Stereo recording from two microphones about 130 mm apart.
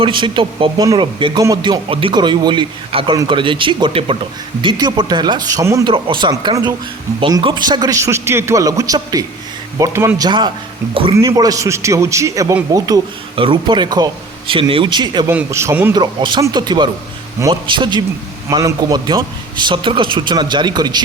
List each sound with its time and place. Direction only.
0.0 s a man's voice: 40° right (ahead or behind)
5.9 s a man's voice: 40° right (ahead or behind); by 10.2 s 20° right (ahead or behind)
10.2 s a man's voice: 35° right (ahead or behind)
13.3 s a man's voice: 40° right (ahead or behind)
15.3 s a man's voice: 20° right (ahead or behind)
16.0 s a man's voice: 35° right (ahead or behind)